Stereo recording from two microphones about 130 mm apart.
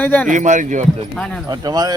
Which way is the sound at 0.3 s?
70° right (ahead or behind).